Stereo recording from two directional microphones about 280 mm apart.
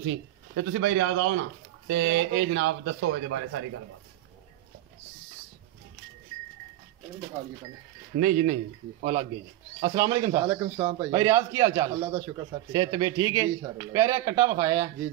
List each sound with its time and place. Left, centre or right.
0.6 s a man's voice: right
8.2 s speech: right; by 14.9 s centre